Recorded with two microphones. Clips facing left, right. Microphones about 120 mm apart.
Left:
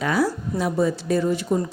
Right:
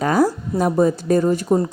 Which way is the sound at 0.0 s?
45° right (ahead or behind).